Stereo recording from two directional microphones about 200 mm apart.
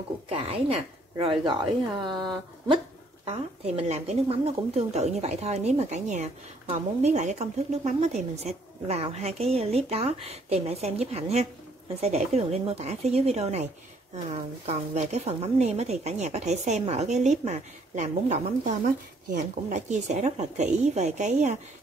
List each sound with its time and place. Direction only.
0.3 s a woman's voice: 30° right (ahead or behind)
3.3 s a woman's voice: 30° right (ahead or behind)